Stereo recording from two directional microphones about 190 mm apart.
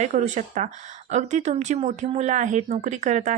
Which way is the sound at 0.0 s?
40° right (ahead or behind).